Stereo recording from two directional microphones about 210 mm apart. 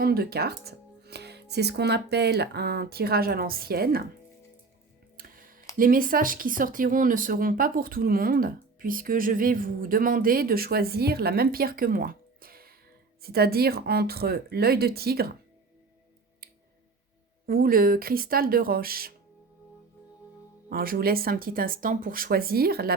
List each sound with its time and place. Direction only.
0.0 s speech: 45° right (ahead or behind)
5.1 s music: 40° right (ahead or behind)
5.7 s speech: 40° right (ahead or behind)
17.4 s speech: 45° right (ahead or behind)
20.7 s speech: 45° right (ahead or behind)